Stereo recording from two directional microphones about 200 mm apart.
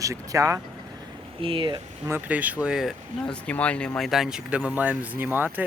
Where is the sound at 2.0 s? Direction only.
10° right (ahead or behind).